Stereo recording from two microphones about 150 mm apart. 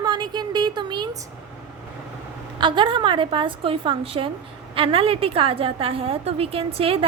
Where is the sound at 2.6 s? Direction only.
30° right (ahead or behind).